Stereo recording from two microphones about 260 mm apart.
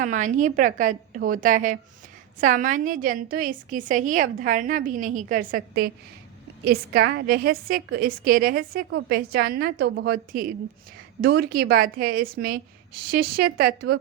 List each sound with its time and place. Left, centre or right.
0.0 s a woman's voice: right